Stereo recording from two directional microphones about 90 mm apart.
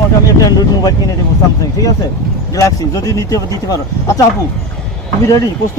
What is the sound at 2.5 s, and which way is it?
Speech, 40° left (ahead or behind).